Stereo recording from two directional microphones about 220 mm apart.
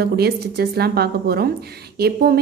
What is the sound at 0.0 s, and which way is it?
A woman's voice, 45° right (ahead or behind).